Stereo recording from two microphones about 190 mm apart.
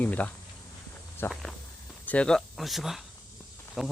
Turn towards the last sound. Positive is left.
turn(degrees=0)  # may be behind; listen again after turning